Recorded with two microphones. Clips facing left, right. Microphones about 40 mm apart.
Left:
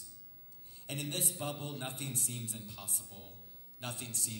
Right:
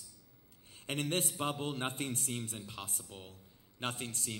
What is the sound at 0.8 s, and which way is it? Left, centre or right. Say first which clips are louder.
A man's voice: right 4 dB; right.